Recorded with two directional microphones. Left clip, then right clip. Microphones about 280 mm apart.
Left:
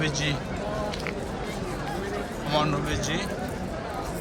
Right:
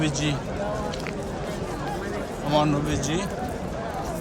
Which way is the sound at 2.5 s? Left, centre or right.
Centre.